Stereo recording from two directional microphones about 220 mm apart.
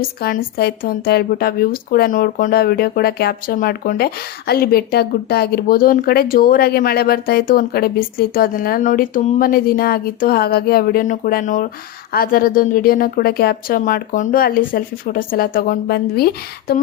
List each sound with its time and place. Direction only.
0.0 s a woman's voice: 40° left (ahead or behind)